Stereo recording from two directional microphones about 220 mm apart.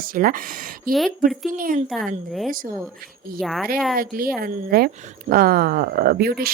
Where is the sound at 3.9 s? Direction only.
40° right (ahead or behind).